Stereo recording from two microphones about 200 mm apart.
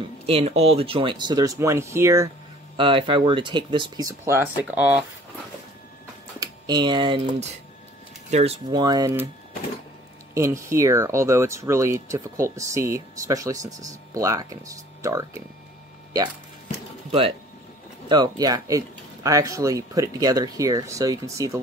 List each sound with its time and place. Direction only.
0.3 s speech: 30° right (ahead or behind); by 2.3 s 15° right (ahead or behind)
2.8 s speech: 25° right (ahead or behind); by 5.0 s 10° right (ahead or behind)
6.4 s speech: 20° right (ahead or behind)
10.3 s speech: 15° right (ahead or behind)
18.0 s speech: 20° right (ahead or behind)